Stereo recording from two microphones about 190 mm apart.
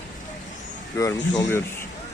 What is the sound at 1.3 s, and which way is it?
Speech, 15° left (ahead or behind).